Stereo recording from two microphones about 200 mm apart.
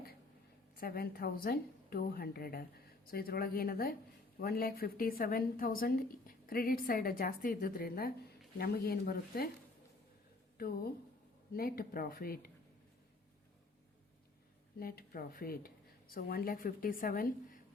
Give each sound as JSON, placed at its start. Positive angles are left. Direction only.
{"t": 0.8, "sound": "a woman's voice", "side_deg": 50}
{"t": 11.5, "sound": "a woman's voice", "side_deg": 50}
{"t": 14.8, "sound": "a woman's voice", "side_deg": 45}